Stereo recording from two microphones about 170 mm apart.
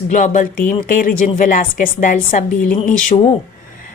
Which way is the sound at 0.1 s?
50° left (ahead or behind).